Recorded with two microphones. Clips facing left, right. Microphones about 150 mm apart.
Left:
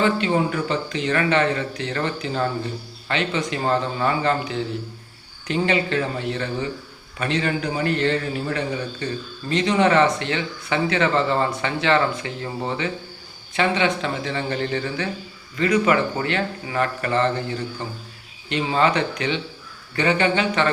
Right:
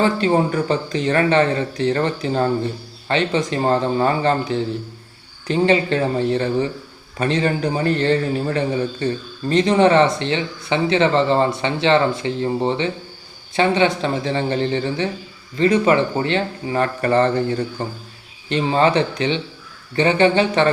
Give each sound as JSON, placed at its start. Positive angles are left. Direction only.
{"t": 0.0, "sound": "a man's voice", "side_deg": -35}